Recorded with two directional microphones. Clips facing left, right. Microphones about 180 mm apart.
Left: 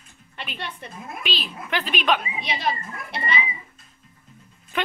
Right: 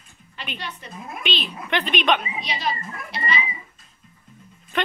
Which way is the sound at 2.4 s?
55° left (ahead or behind).